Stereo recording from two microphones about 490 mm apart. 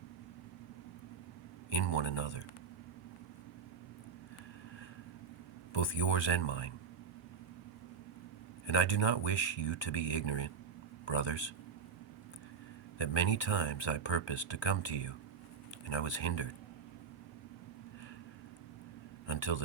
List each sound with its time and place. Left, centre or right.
1.7 s speech: left
5.7 s speech: left
8.6 s speech: left
13.0 s speech: left
19.3 s speech: left